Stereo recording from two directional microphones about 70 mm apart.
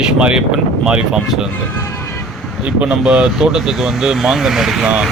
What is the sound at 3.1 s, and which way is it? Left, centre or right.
Speech, centre.